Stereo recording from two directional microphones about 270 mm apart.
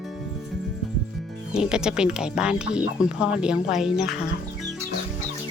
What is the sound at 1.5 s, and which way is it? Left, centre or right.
Speech, centre.